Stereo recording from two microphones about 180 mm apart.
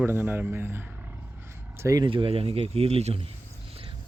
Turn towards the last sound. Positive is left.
turn(degrees=-35)  # may be behind; listen again after turning